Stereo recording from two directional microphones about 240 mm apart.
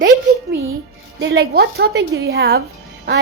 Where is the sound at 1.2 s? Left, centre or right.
Right.